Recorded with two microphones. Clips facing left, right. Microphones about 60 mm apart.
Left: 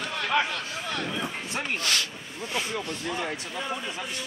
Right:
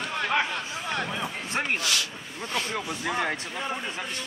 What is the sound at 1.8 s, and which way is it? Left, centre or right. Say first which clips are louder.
Speech: even; left.